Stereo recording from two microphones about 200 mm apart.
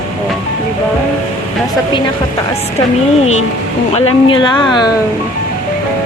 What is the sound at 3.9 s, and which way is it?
Speech, 30° left (ahead or behind).